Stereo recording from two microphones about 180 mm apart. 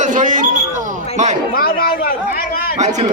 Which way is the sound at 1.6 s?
55° left (ahead or behind).